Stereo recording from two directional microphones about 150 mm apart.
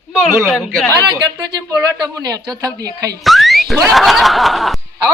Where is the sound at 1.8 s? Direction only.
20° right (ahead or behind).